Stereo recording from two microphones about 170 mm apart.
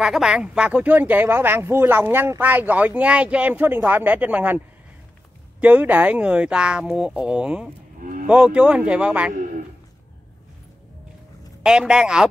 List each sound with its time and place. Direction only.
0.0 s speech: 5° right (ahead or behind)
5.6 s speech: 10° right (ahead or behind)
8.0 s a sound: 50° right (ahead or behind)
8.3 s speech: 5° right (ahead or behind)
11.6 s speech: 5° right (ahead or behind)